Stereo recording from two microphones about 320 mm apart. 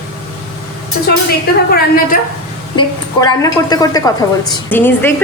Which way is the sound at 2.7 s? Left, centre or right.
Centre.